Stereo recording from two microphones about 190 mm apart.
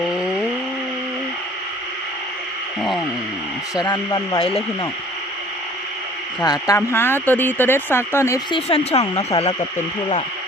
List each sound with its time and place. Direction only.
0.1 s a sound: centre (ahead or behind)
3.8 s speech: 20° left (ahead or behind)
6.4 s speech: 20° left (ahead or behind)
8.5 s speech: 30° left (ahead or behind)
9.0 s speech: 20° left (ahead or behind)